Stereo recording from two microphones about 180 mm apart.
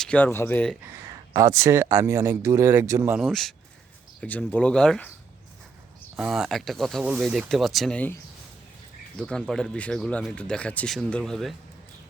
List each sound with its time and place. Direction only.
0.0 s speech: 10° left (ahead or behind)
0.9 s speech: 15° right (ahead or behind)
3.2 s speech: centre (ahead or behind)
6.1 s speech: 5° right (ahead or behind)